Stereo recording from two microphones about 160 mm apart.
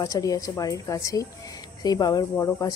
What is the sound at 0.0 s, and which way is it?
Speech, 20° left (ahead or behind).